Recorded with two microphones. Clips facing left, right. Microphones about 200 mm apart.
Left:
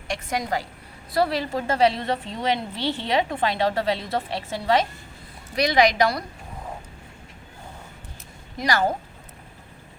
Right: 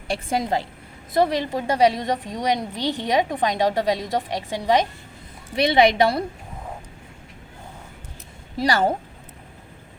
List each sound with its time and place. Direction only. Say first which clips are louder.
0.1 s a woman's voice: right 3 dB; 30° right (ahead or behind)
5.5 s a woman's voice: right 2 dB; 25° right (ahead or behind)
8.5 s a woman's voice: right 3 dB; 30° right (ahead or behind)